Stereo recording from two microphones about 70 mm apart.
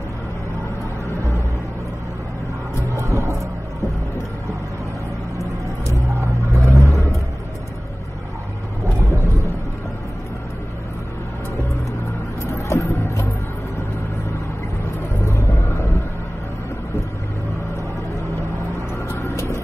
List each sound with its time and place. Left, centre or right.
3.0 s music: right
6.5 s vehicle: right
9.1 s a sound: right
12.4 s music: left
15.2 s vehicle: left
19.0 s music: left